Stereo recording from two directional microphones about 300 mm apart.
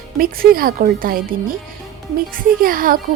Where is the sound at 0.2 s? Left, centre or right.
Right.